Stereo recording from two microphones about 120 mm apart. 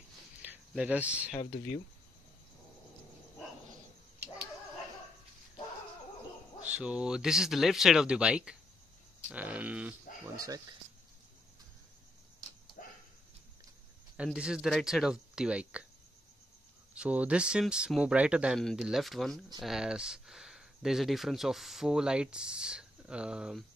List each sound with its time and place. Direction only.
0.4 s a sound: 10° right (ahead or behind)
6.6 s speech: 10° right (ahead or behind)
10.2 s speech: 30° right (ahead or behind)
12.8 s a sound: 90° left
14.1 s speech: 5° right (ahead or behind)
16.9 s speech: 10° right (ahead or behind)